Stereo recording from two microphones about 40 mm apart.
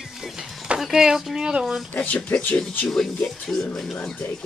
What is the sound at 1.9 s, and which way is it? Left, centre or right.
Speech, left.